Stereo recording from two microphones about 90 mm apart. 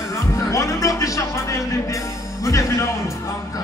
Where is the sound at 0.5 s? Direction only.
35° left (ahead or behind).